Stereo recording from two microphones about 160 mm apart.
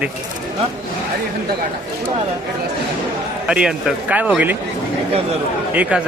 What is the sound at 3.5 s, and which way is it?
Speech, 5° right (ahead or behind).